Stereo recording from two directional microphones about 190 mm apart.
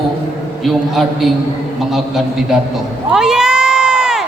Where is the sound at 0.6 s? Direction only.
Centre (ahead or behind).